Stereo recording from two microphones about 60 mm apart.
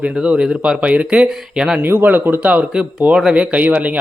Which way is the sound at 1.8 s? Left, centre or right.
Right.